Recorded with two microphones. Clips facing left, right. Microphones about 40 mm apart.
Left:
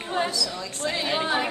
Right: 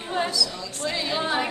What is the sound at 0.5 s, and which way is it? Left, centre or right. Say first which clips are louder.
Speech: left 1 dB; left.